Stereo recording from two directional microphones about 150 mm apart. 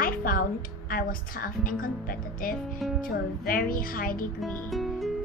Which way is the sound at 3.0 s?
70° left (ahead or behind).